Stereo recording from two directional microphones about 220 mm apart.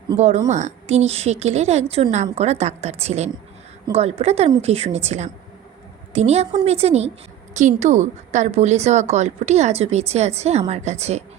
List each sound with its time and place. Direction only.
0.2 s a woman's voice: 30° right (ahead or behind)